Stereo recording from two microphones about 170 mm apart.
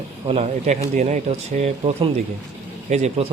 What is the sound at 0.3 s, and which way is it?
Speech, 40° right (ahead or behind).